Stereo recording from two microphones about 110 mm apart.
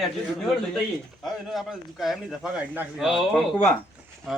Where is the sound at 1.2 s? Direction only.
Centre (ahead or behind).